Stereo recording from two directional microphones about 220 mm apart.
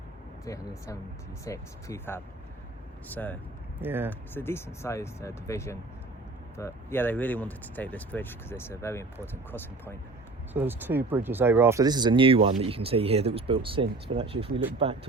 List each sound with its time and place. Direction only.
0.4 s speech: 15° left (ahead or behind)
3.8 s speech: 10° right (ahead or behind)
4.4 s speech: 10° left (ahead or behind)
10.5 s speech: 10° right (ahead or behind); by 14.6 s 25° right (ahead or behind)